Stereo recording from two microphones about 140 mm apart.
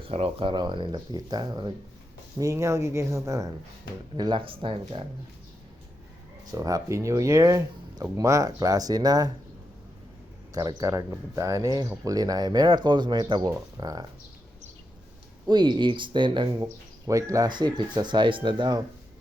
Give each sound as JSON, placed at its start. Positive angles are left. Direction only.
{"t": 0.0, "sound": "speech", "side_deg": -45}
{"t": 4.2, "sound": "speech", "side_deg": -35}
{"t": 6.5, "sound": "speech", "side_deg": -25}
{"t": 10.5, "sound": "speech", "side_deg": -25}
{"t": 15.4, "sound": "speech", "side_deg": -30}
{"t": 17.1, "sound": "speech", "side_deg": -25}